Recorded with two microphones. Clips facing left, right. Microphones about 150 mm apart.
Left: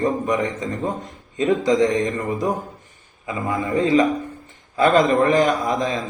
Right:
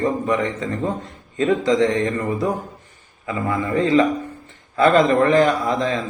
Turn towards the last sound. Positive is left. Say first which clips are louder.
# right 1 dB
turn(degrees=20)  # may be behind; listen again after turning